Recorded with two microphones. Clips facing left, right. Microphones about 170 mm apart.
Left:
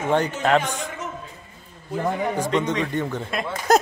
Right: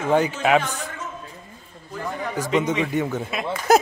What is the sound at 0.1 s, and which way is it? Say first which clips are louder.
Speech: right 1 dB; 5° right (ahead or behind).